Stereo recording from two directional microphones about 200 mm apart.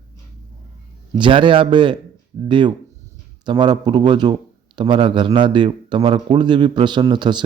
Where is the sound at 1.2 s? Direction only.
25° right (ahead or behind).